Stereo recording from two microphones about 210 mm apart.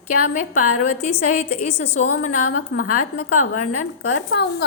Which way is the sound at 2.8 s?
40° left (ahead or behind).